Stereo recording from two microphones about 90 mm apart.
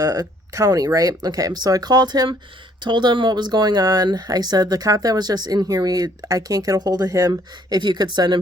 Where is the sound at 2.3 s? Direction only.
70° right (ahead or behind).